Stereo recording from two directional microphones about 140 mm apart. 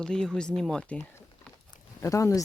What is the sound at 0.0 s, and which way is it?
Speech, 5° left (ahead or behind).